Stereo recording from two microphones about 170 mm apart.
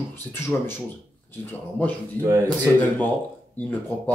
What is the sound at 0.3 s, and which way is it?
Speech, 15° left (ahead or behind).